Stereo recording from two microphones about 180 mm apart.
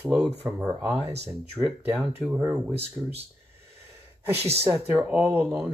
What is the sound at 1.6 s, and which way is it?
Speech, 5° right (ahead or behind).